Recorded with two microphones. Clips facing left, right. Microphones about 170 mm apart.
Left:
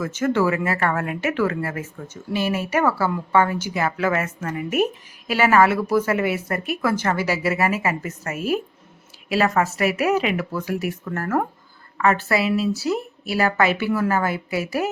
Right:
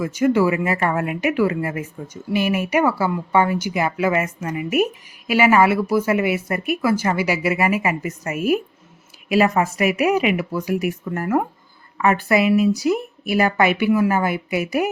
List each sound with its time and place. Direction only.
0.0 s a woman's voice: 10° right (ahead or behind)